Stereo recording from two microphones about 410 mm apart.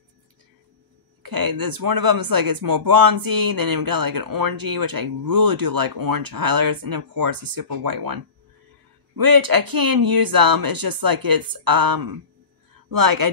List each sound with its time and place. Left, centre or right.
1.2 s speech: right